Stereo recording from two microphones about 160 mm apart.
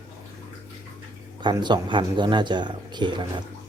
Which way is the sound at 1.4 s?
30° right (ahead or behind).